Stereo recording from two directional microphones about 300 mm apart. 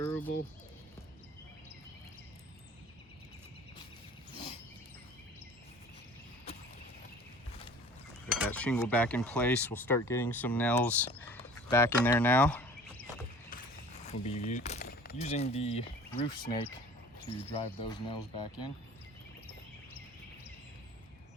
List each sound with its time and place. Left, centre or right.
8.3 s speech: centre
14.1 s speech: left